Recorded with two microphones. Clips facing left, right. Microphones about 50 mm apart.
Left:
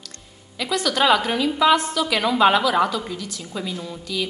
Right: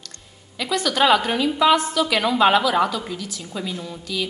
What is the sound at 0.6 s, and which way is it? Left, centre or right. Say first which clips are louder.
A woman's voice: right 1 dB; centre.